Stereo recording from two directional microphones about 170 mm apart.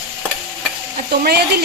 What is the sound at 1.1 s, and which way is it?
Speech, 65° right (ahead or behind).